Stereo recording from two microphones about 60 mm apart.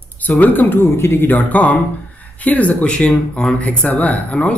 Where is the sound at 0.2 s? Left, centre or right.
Left.